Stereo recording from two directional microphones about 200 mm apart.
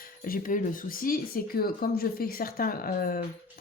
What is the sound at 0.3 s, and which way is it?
Speech, 45° left (ahead or behind).